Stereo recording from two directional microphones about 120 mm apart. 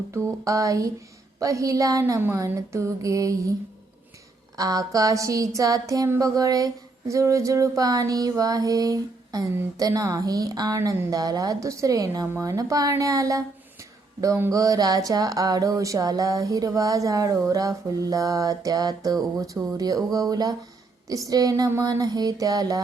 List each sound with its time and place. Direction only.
0.1 s speech: 25° right (ahead or behind)
4.5 s speech: 30° right (ahead or behind)